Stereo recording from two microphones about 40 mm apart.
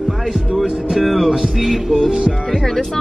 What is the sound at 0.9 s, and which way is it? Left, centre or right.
Music, centre.